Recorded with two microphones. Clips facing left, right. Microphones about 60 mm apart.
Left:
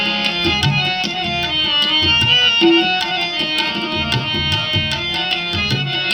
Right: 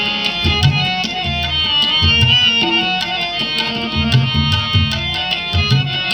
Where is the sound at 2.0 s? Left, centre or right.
Left.